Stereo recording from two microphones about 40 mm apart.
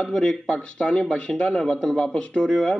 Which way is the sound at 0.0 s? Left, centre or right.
Centre.